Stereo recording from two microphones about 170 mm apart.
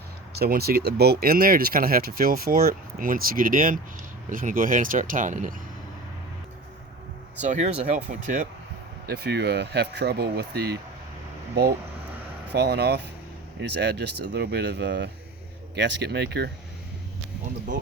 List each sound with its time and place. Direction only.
0.3 s speech: 65° right (ahead or behind); by 5.5 s 50° right (ahead or behind)
7.3 s speech: 45° right (ahead or behind)
9.0 s speech: 70° right (ahead or behind)
12.5 s speech: 70° right (ahead or behind)